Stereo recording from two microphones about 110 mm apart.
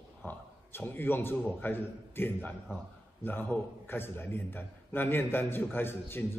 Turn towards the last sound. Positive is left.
turn(degrees=20)  # may be behind; listen again after turning